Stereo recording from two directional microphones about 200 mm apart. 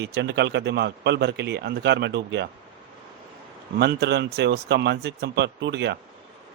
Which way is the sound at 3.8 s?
55° right (ahead or behind).